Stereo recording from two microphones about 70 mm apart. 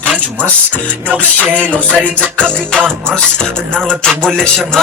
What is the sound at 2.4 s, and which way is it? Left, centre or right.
Music, centre.